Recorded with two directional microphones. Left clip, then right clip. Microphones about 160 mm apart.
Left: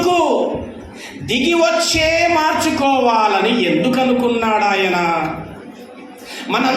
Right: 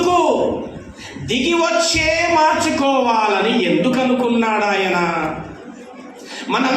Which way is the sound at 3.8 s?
35° left (ahead or behind).